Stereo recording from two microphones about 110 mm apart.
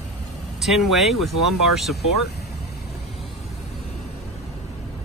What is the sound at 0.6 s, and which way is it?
Speech, centre (ahead or behind).